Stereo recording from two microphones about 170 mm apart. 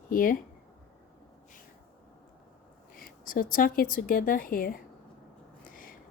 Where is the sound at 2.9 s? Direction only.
55° left (ahead or behind).